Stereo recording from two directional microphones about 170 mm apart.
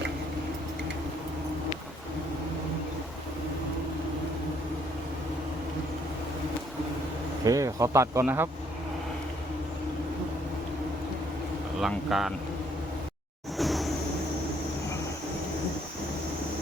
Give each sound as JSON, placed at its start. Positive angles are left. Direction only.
{"t": 7.4, "sound": "speech", "side_deg": -20}
{"t": 11.8, "sound": "speech", "side_deg": 0}
{"t": 13.6, "sound": "a sound", "side_deg": 0}